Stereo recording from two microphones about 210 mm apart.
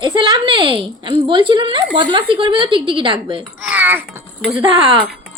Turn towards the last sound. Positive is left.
turn(degrees=-25)  # may be behind; listen again after turning